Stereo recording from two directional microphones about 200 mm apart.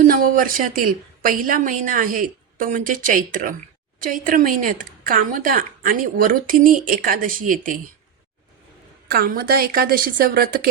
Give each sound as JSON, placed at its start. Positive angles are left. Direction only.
{"t": 0.0, "sound": "speech", "side_deg": -45}
{"t": 9.0, "sound": "speech", "side_deg": -50}